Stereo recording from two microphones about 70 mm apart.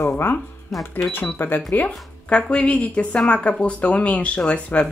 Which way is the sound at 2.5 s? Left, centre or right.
Centre.